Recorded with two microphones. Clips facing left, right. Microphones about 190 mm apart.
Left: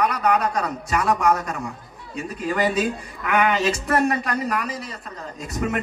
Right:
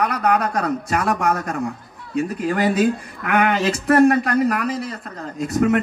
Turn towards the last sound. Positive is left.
turn(degrees=-55)  # may be behind; listen again after turning